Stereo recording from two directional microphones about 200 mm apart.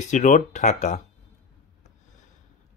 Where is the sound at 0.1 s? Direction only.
40° left (ahead or behind).